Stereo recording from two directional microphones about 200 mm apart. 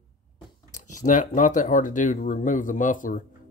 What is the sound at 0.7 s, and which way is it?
Speech, 40° left (ahead or behind).